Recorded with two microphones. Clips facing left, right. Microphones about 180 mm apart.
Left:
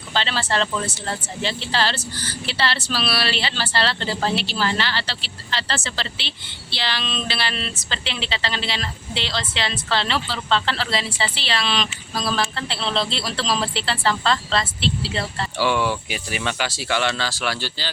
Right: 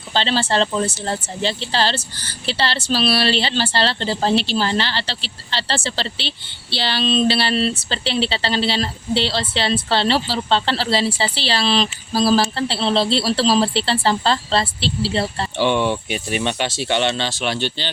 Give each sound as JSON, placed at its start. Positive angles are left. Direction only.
{"t": 0.1, "sound": "a woman's voice", "side_deg": -30}